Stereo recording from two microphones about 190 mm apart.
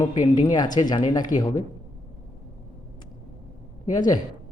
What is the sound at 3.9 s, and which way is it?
Speech, 20° left (ahead or behind).